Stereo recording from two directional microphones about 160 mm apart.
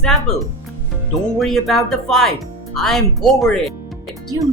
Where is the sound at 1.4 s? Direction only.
Centre (ahead or behind).